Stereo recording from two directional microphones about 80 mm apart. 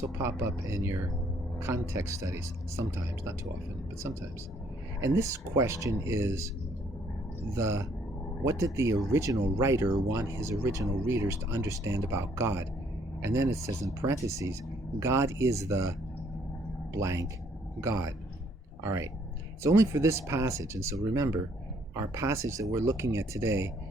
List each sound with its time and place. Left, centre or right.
0.2 s speech: right
4.9 s speech: right
7.5 s speech: right
18.8 s speech: right